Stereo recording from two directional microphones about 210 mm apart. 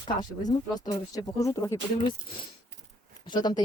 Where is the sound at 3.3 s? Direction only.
20° left (ahead or behind).